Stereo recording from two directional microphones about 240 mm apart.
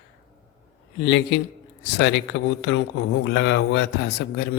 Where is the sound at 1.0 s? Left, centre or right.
Left.